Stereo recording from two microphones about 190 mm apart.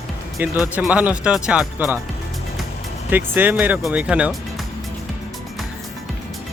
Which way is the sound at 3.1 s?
10° right (ahead or behind).